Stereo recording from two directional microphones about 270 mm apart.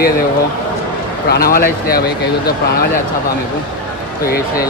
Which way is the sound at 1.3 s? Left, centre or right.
Left.